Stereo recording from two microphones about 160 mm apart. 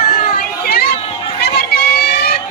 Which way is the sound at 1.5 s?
90° left.